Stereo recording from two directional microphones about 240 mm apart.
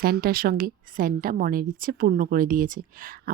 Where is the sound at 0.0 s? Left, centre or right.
Right.